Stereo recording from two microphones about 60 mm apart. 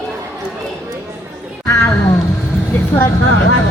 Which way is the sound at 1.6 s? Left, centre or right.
Left.